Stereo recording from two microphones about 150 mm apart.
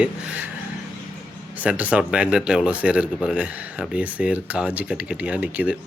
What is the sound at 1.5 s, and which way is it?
Speech, 10° right (ahead or behind).